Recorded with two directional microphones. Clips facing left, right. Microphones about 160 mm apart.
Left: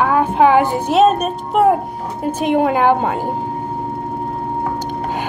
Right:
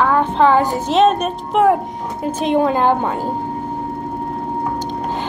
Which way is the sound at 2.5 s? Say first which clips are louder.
Left 1 dB; 65° left (ahead or behind).